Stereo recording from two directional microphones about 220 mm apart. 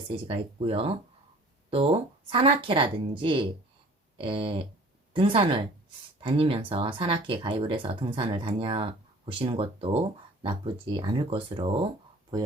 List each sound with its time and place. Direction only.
0.3 s speech: 25° right (ahead or behind)